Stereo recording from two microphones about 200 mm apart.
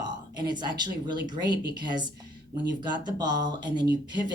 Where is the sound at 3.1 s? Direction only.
20° right (ahead or behind).